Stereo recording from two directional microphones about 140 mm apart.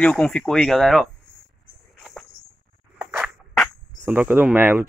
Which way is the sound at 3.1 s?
Centre (ahead or behind).